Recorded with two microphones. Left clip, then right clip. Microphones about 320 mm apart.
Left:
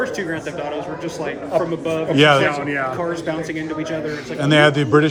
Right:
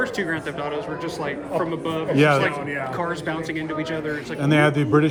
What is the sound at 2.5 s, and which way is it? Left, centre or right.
Speech, left.